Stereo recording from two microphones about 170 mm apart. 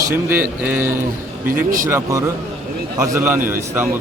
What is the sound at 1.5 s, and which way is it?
Speech, 55° right (ahead or behind).